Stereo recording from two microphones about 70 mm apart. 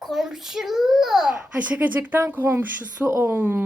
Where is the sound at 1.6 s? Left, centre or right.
Right.